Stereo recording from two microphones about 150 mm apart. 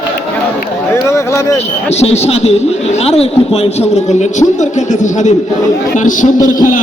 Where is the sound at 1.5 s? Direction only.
45° left (ahead or behind).